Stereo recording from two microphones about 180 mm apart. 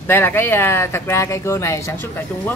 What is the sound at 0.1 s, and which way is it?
Speech, 10° left (ahead or behind).